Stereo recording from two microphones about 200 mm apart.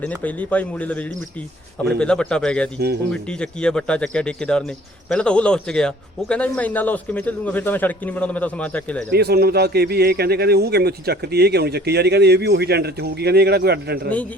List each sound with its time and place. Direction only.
0.0 s a man's voice: 5° left (ahead or behind)
9.0 s a man's voice: 55° right (ahead or behind)